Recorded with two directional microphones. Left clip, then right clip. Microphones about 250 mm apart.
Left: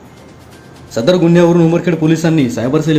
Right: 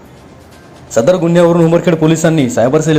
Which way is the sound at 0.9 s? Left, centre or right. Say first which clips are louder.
Right 1 dB; centre.